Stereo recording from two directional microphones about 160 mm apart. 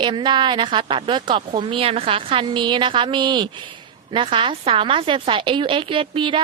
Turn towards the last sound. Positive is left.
turn(degrees=-30)  # may be behind; listen again after turning